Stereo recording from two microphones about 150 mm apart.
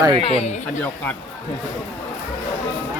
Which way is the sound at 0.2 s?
40° left (ahead or behind).